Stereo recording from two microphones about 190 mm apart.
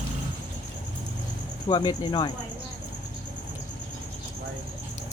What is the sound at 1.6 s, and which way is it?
Speech, 25° left (ahead or behind).